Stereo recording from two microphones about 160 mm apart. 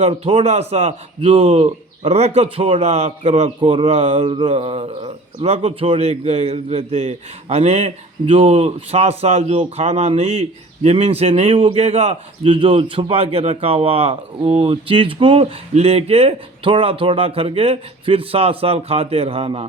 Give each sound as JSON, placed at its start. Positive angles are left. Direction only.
{"t": 0.0, "sound": "a man's voice", "side_deg": -40}